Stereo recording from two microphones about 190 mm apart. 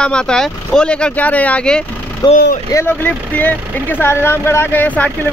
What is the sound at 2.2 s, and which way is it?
Speech, 20° left (ahead or behind).